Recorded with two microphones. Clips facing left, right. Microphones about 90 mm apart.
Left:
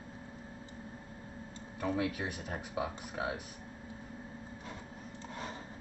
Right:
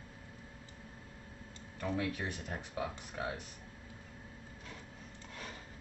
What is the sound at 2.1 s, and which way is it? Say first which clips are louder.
Speech: left 1 dB; 10° left (ahead or behind).